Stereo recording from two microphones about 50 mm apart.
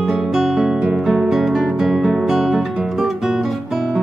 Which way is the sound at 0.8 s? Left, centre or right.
Centre.